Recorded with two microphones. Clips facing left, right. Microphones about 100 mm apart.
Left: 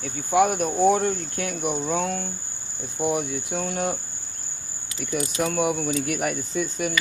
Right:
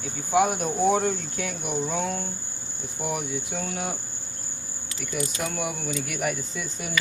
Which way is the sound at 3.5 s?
50° left (ahead or behind).